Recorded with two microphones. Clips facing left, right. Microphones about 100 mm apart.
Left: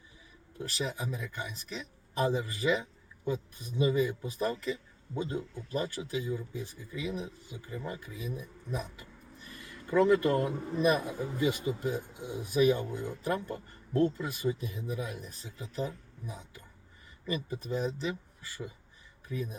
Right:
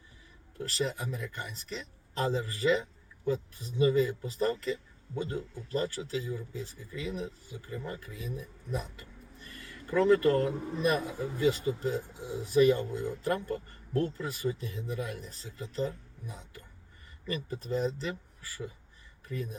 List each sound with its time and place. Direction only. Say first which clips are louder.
0.9 s speech: right 1 dB; 15° left (ahead or behind)
8.7 s speech: right 1 dB; 10° left (ahead or behind)